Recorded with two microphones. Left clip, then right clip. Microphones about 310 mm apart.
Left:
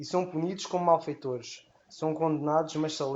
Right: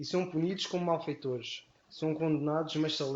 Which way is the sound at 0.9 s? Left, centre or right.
Centre.